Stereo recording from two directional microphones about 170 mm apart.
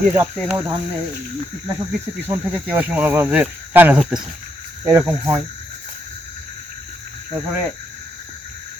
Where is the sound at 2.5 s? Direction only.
10° right (ahead or behind).